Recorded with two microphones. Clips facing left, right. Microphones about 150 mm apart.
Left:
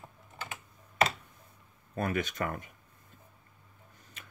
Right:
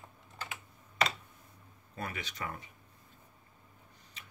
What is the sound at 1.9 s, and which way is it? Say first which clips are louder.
Speech: left 9 dB; 50° left (ahead or behind).